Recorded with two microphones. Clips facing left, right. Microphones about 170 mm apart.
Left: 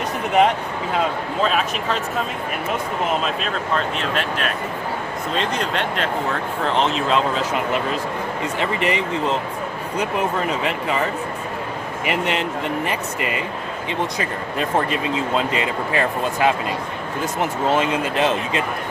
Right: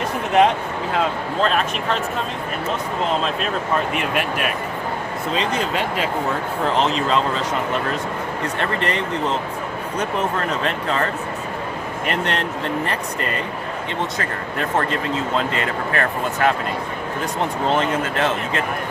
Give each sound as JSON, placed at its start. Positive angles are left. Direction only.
{"t": 1.4, "sound": "speech", "side_deg": 5}
{"t": 3.8, "sound": "speech", "side_deg": -10}
{"t": 8.5, "sound": "speech", "side_deg": 10}
{"t": 17.7, "sound": "speech", "side_deg": 10}